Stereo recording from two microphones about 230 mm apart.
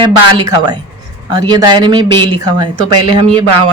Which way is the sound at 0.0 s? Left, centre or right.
Centre.